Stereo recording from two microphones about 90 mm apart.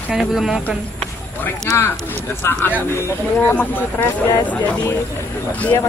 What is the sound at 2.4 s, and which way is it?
Speech, 25° left (ahead or behind).